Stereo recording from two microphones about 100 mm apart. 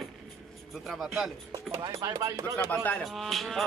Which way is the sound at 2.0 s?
35° right (ahead or behind).